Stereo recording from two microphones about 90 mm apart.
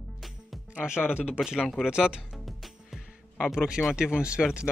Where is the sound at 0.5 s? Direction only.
5° right (ahead or behind).